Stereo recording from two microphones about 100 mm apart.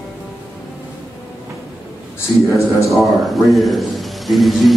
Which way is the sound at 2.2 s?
30° left (ahead or behind).